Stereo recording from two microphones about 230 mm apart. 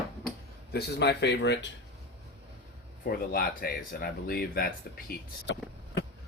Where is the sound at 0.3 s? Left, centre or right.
Left.